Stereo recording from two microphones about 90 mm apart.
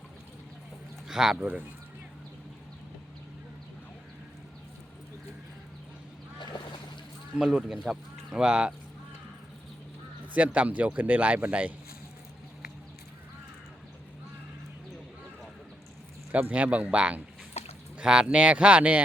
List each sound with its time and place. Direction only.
1.0 s speech: 5° right (ahead or behind)
6.4 s boat: 60° left (ahead or behind)
7.3 s speech: 5° right (ahead or behind)
10.3 s speech: 15° right (ahead or behind)
16.3 s speech: 15° right (ahead or behind)